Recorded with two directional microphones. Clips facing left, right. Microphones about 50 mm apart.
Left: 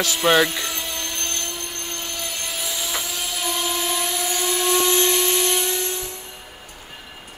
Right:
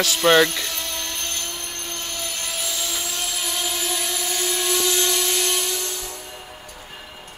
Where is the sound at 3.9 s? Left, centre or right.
Centre.